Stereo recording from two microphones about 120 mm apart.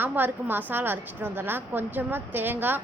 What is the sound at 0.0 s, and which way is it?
A woman's voice, 15° right (ahead or behind).